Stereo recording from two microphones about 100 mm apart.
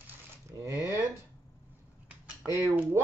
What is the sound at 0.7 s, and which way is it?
Speech, 35° left (ahead or behind).